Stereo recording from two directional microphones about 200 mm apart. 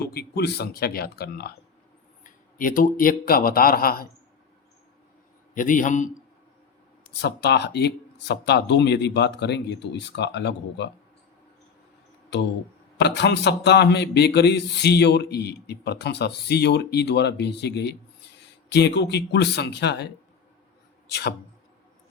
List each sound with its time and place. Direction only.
0.0 s speech: 50° left (ahead or behind)
5.5 s a man's voice: 40° left (ahead or behind)
7.2 s a man's voice: 55° left (ahead or behind)
13.0 s a man's voice: 60° left (ahead or behind)
21.1 s speech: 55° left (ahead or behind)